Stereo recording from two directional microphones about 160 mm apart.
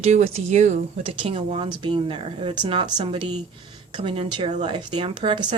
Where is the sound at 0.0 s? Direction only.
45° right (ahead or behind).